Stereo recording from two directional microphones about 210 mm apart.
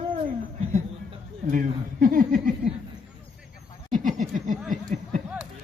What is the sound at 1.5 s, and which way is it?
Speech, 40° right (ahead or behind).